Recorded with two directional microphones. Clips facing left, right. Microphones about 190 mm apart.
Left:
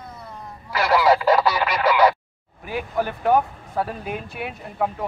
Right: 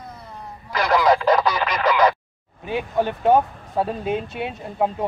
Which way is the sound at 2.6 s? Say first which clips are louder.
Right 3 dB; 20° right (ahead or behind).